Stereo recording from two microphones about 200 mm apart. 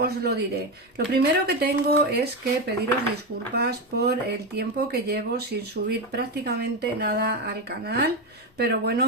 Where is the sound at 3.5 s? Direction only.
55° right (ahead or behind).